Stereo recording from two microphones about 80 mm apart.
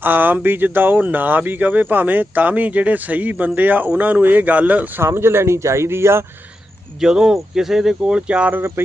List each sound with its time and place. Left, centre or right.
0.0 s speech: right
5.0 s speech: right
7.0 s speech: centre